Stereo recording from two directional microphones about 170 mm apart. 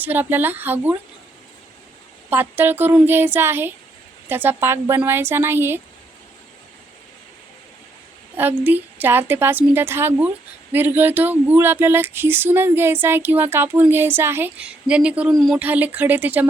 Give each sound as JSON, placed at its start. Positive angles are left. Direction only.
{"t": 0.0, "sound": "a woman's voice", "side_deg": -10}
{"t": 2.3, "sound": "a woman's voice", "side_deg": -10}
{"t": 8.4, "sound": "a woman's voice", "side_deg": -10}